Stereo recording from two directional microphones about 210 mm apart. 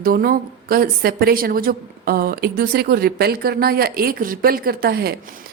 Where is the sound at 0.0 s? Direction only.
45° right (ahead or behind).